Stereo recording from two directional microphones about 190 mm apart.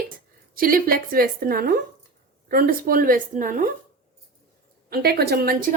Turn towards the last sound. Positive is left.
turn(degrees=-50)  # may be behind; listen again after turning